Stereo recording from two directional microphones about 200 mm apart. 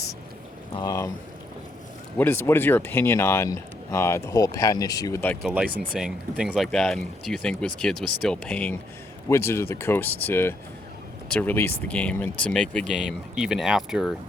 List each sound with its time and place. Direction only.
0.7 s speech: 20° left (ahead or behind)
2.1 s speech: 10° left (ahead or behind)